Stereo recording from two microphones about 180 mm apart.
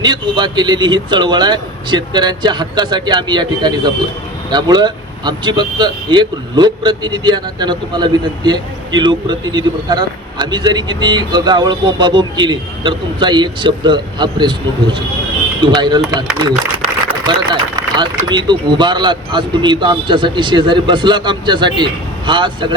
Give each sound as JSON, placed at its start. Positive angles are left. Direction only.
{"t": 0.0, "sound": "a man's voice", "side_deg": -25}
{"t": 17.1, "sound": "a sound", "side_deg": -25}
{"t": 18.3, "sound": "a man's voice", "side_deg": -25}